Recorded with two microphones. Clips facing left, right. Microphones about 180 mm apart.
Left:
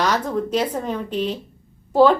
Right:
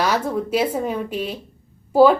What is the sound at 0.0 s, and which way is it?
A woman's voice, 10° right (ahead or behind).